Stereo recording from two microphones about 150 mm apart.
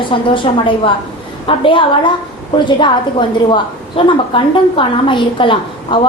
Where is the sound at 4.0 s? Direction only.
35° left (ahead or behind).